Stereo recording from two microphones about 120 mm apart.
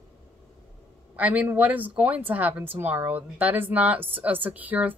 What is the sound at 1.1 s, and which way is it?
A woman's voice, 10° right (ahead or behind).